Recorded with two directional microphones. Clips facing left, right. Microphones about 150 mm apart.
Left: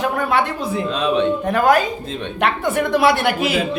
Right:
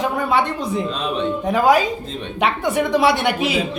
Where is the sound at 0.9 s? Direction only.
70° left (ahead or behind).